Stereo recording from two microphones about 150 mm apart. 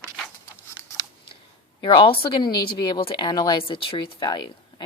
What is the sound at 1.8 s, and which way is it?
Speech, 35° left (ahead or behind).